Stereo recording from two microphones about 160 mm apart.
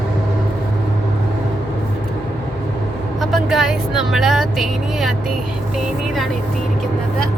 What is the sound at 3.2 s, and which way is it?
Vehicle, centre (ahead or behind).